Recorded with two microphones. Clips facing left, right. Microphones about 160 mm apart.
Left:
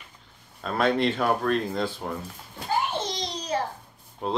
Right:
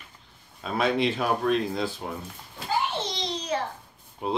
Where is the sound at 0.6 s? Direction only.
Centre (ahead or behind).